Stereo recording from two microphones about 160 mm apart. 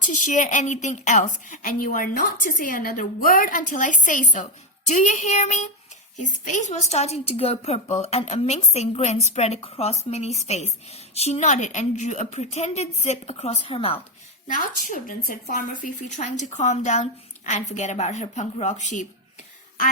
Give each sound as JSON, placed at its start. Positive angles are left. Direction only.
{"t": 0.0, "sound": "a woman's voice", "side_deg": 50}
{"t": 14.4, "sound": "a woman's voice", "side_deg": 55}